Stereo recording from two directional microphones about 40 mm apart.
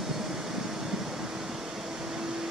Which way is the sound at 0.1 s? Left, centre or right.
Centre.